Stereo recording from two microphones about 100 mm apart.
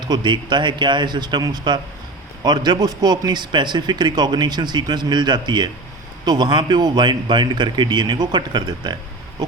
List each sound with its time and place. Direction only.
0.1 s a man's voice: 50° right (ahead or behind)